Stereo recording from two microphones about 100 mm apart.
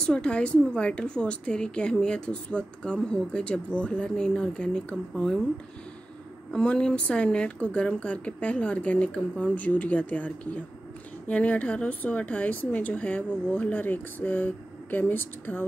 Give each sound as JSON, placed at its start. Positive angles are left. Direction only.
{"t": 0.0, "sound": "speech", "side_deg": 10}
{"t": 6.5, "sound": "speech", "side_deg": 10}